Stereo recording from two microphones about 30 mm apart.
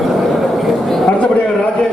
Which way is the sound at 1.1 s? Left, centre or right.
Left.